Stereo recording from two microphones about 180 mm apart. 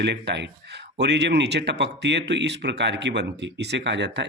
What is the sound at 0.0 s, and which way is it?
A man's voice, 70° right (ahead or behind).